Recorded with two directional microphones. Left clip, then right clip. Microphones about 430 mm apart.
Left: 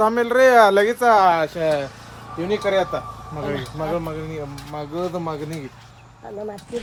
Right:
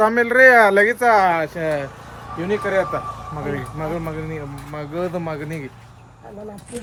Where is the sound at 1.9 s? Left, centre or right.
Centre.